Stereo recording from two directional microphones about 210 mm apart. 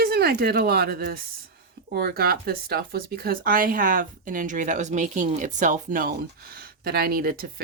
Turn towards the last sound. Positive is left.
turn(degrees=-45)  # may be behind; listen again after turning